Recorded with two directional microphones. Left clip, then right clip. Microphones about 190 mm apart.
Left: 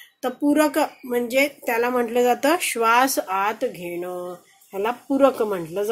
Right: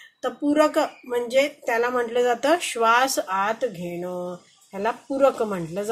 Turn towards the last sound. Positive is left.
turn(degrees=35)  # may be behind; listen again after turning